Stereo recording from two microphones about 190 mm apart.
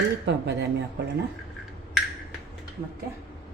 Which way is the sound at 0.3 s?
65° right (ahead or behind).